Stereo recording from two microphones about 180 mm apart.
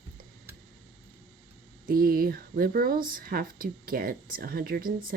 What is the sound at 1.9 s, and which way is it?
Speech, 55° right (ahead or behind).